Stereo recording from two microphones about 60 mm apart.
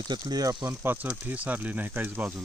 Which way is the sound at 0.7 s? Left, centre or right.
Right.